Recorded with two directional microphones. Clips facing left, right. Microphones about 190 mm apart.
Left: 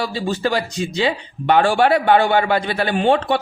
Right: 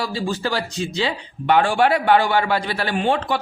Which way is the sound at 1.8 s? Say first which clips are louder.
Left 2 dB; 30° left (ahead or behind).